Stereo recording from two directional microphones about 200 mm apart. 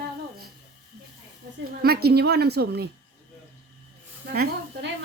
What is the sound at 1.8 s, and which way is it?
A woman's voice, 50° right (ahead or behind).